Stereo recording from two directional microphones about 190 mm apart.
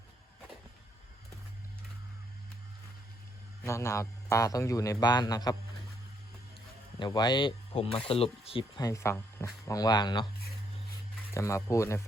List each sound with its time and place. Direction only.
3.7 s a man's voice: 15° left (ahead or behind)
7.0 s speech: 20° left (ahead or behind)
8.8 s speech: 15° left (ahead or behind)
11.3 s a man's voice: 15° left (ahead or behind)